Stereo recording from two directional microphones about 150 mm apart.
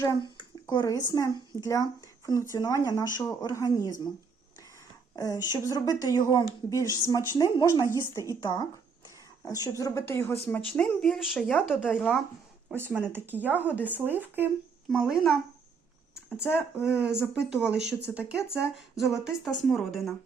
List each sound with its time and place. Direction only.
0.0 s speech: 25° left (ahead or behind)
5.1 s speech: 25° left (ahead or behind)
10.7 s speech: 5° left (ahead or behind)
16.6 s speech: 5° right (ahead or behind)